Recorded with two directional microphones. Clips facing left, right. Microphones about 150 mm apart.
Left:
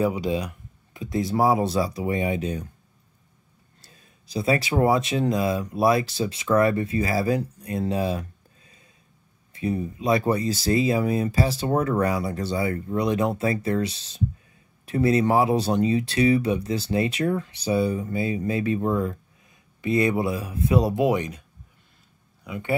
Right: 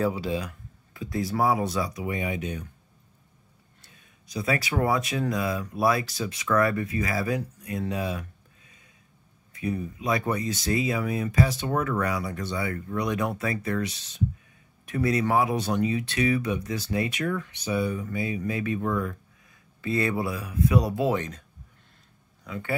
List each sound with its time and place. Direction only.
0.0 s speech: 20° left (ahead or behind); by 2.7 s 35° left (ahead or behind)
3.8 s speech: 35° left (ahead or behind); by 22.8 s 15° left (ahead or behind)